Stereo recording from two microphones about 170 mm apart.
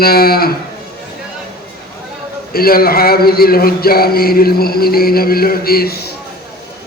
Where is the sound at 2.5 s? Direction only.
60° left (ahead or behind).